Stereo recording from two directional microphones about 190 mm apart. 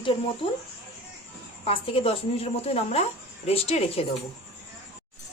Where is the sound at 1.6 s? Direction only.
30° left (ahead or behind).